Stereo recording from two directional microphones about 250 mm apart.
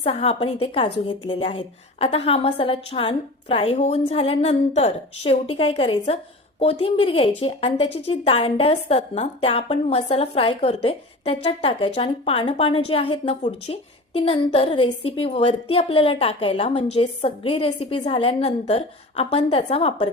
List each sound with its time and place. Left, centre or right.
0.0 s a woman's voice: left